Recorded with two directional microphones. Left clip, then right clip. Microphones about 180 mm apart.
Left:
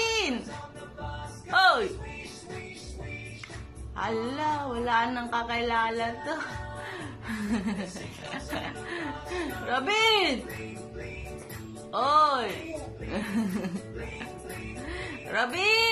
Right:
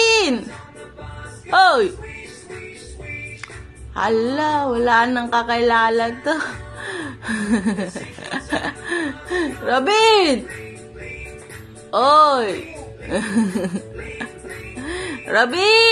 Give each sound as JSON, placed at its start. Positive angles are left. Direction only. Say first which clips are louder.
{"t": 0.0, "sound": "music", "louder": "right 12 dB", "side_deg": -35}
{"t": 1.5, "sound": "music", "louder": "right 9 dB", "side_deg": -30}
{"t": 3.9, "sound": "speech", "louder": "right 12 dB", "side_deg": -30}
{"t": 11.9, "sound": "speech", "louder": "right 10 dB", "side_deg": -30}
{"t": 14.9, "sound": "speech", "louder": "right 13 dB", "side_deg": -35}